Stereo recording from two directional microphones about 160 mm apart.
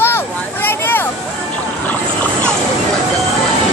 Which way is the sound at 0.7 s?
15° left (ahead or behind).